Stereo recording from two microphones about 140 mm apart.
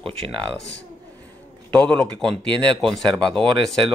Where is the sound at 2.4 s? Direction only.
35° right (ahead or behind).